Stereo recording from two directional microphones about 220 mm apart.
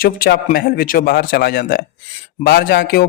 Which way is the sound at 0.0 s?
45° left (ahead or behind).